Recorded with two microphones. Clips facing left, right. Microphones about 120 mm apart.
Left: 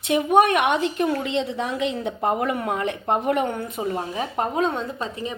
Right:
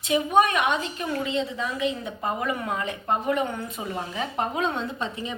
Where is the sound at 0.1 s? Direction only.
60° left (ahead or behind).